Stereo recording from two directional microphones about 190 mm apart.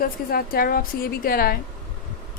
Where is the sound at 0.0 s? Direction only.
50° left (ahead or behind).